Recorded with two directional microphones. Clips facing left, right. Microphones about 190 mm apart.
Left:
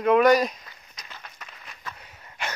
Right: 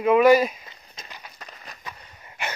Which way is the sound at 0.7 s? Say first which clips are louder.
Right 2 dB; 20° right (ahead or behind).